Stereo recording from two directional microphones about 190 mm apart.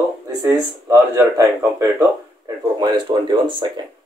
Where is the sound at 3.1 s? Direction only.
25° right (ahead or behind).